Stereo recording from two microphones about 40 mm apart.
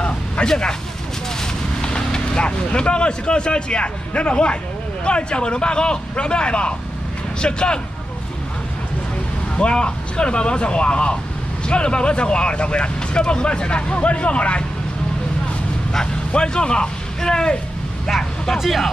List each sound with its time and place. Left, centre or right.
0.5 s speech: centre
1.8 s speech: centre
9.6 s speech: left
16.3 s speech: left
18.6 s speech: centre